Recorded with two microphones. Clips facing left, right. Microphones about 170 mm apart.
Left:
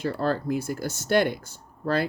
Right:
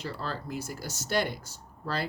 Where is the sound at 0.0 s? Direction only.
50° left (ahead or behind).